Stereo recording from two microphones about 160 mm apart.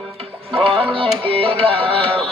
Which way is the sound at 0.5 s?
35° right (ahead or behind).